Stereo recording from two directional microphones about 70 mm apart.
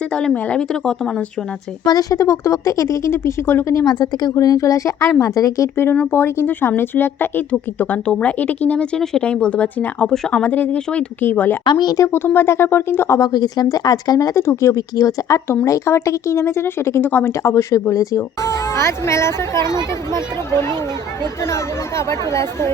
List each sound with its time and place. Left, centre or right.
0.1 s speech: centre
1.8 s speech: left
3.8 s a woman's voice: left
5.7 s speech: left
8.0 s speech: centre
11.6 s speech: left
11.9 s speech: left
13.1 s a woman's voice: left
14.3 s speech: left
14.8 s a woman's voice: left
17.1 s speech: left
17.4 s speech: left
21.4 s speech: left